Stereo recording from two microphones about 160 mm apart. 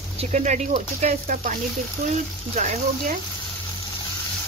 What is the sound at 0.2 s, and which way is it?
Speech, 45° right (ahead or behind).